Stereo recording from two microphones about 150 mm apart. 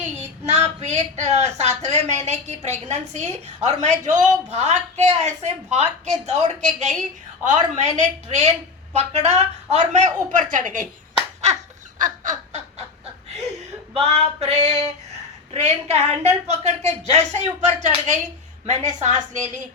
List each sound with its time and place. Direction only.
0.0 s a woman's voice: 45° right (ahead or behind)
11.9 s laughter: 60° right (ahead or behind)
13.9 s a woman's voice: 45° right (ahead or behind)